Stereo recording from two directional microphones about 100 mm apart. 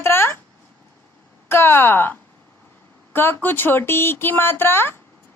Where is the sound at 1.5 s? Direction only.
25° left (ahead or behind).